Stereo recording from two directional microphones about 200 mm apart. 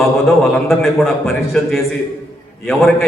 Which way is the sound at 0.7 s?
Centre (ahead or behind).